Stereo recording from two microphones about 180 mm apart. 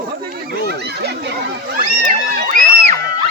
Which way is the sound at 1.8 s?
50° right (ahead or behind).